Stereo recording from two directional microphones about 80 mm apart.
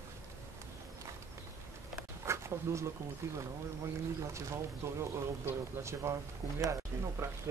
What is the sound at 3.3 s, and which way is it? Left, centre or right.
Speech, right.